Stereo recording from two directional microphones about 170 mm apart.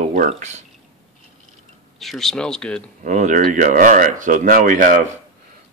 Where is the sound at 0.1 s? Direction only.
45° right (ahead or behind).